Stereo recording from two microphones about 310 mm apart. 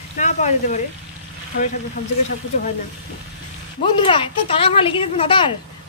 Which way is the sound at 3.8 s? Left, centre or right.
Centre.